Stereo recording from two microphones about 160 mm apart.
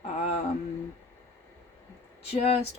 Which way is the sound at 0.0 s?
40° left (ahead or behind).